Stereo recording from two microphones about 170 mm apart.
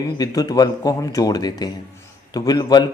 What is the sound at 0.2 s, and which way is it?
A man's voice, 20° left (ahead or behind).